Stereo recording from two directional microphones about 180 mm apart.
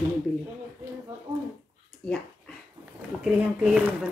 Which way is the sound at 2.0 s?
5° left (ahead or behind).